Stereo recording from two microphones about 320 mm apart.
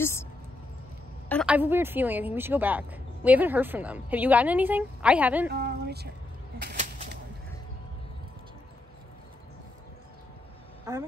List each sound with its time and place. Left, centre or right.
0.0 s speech: centre
1.3 s a woman's voice: centre
5.5 s a sound: right
10.9 s speech: centre